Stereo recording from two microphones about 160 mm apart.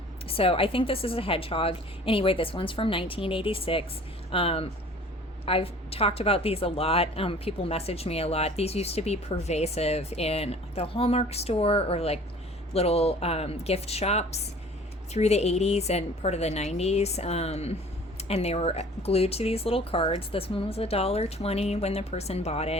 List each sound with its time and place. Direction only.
0.3 s a woman's voice: 35° left (ahead or behind)